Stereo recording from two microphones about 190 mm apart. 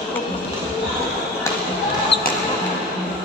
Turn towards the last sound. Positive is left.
turn(degrees=65)  # may be behind; listen again after turning